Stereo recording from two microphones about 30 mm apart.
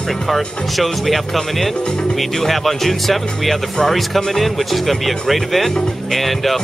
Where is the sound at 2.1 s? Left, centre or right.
Centre.